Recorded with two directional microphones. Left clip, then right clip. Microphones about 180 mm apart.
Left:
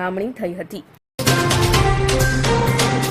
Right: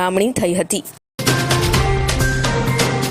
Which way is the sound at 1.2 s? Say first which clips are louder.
Even; centre (ahead or behind).